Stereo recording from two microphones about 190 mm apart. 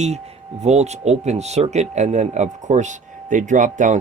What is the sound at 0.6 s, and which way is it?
Speech, 35° right (ahead or behind).